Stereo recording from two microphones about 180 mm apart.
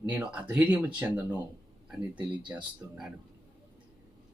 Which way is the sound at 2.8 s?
10° right (ahead or behind).